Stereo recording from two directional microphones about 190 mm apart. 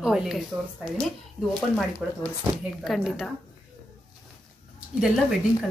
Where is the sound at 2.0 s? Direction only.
Centre (ahead or behind).